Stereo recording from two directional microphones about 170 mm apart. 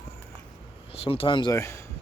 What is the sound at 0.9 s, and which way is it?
Speech, 35° left (ahead or behind).